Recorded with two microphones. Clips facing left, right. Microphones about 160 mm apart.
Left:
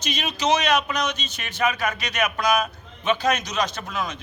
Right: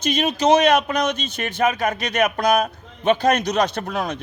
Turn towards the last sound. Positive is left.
turn(degrees=-60)  # may be behind; listen again after turning